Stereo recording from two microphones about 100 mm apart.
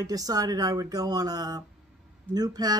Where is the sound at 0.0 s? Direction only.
35° right (ahead or behind).